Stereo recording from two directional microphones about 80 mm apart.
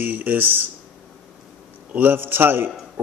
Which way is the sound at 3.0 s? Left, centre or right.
Right.